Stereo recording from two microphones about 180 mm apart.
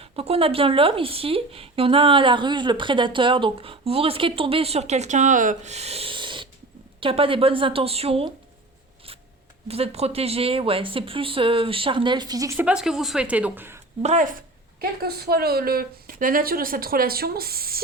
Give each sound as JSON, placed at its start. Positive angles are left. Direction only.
{"t": 0.0, "sound": "speech", "side_deg": -30}
{"t": 9.6, "sound": "speech", "side_deg": -35}
{"t": 14.0, "sound": "speech", "side_deg": -40}
{"t": 14.8, "sound": "speech", "side_deg": -60}